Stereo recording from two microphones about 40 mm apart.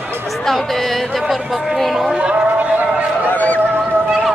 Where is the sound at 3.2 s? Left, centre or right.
Left.